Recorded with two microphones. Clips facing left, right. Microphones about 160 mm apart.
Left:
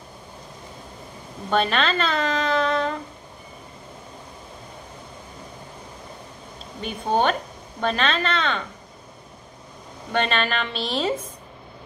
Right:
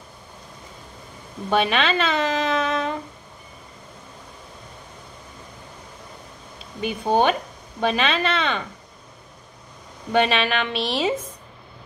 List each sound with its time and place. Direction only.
1.5 s speech: 5° right (ahead or behind)
6.8 s speech: 10° right (ahead or behind)
10.1 s speech: 5° right (ahead or behind)